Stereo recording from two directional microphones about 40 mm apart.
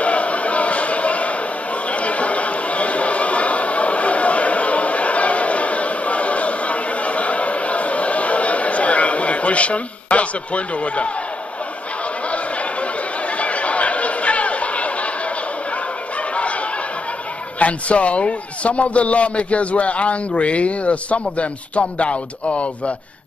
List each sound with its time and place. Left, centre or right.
0.0 s a sound: left
13.4 s chatter: left
17.6 s a man's voice: left